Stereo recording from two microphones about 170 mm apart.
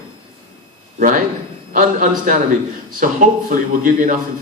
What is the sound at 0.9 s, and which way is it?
Speech, 50° right (ahead or behind).